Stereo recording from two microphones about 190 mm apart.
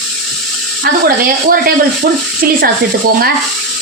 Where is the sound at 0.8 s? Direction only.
50° right (ahead or behind).